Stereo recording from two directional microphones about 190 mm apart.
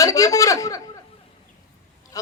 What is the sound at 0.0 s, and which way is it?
Speech, 15° left (ahead or behind).